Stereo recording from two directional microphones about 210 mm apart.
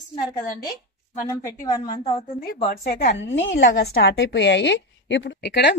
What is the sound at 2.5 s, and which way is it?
A woman's voice, 50° left (ahead or behind).